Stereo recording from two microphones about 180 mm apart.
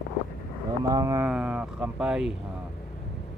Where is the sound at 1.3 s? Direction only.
5° right (ahead or behind).